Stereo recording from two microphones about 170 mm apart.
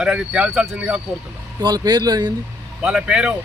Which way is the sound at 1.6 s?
25° right (ahead or behind).